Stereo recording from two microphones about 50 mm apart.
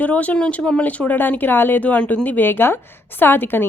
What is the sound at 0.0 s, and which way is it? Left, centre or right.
Speech, left.